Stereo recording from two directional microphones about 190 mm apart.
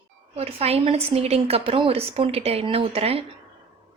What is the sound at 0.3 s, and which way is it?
A woman's voice, 30° right (ahead or behind).